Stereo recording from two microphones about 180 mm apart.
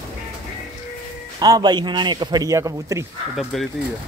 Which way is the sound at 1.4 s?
20° right (ahead or behind).